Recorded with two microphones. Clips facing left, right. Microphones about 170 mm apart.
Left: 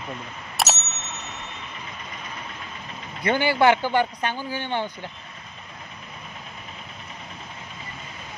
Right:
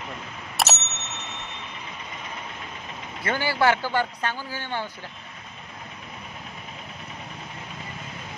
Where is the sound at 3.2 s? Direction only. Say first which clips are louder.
Left 4 dB; 20° left (ahead or behind).